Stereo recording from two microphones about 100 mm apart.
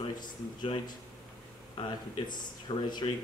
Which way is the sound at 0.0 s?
55° left (ahead or behind).